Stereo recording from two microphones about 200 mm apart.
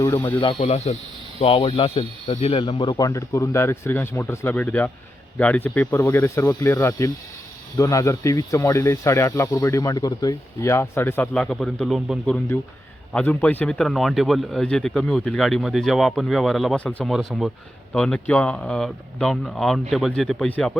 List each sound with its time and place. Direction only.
0.0 s speech: 15° left (ahead or behind)